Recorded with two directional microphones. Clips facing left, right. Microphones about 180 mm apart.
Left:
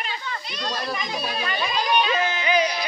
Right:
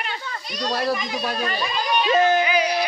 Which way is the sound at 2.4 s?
10° right (ahead or behind).